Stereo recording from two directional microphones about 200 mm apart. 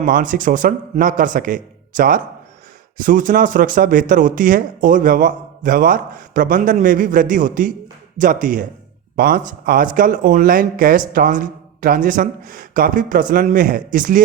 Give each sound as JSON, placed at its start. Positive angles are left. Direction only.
{"t": 0.0, "sound": "a man's voice", "side_deg": -40}